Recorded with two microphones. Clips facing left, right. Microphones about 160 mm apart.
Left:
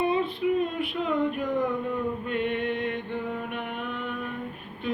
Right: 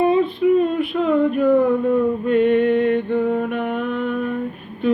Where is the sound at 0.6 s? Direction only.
40° right (ahead or behind).